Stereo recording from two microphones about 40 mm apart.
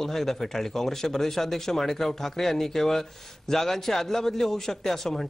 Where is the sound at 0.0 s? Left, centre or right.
Centre.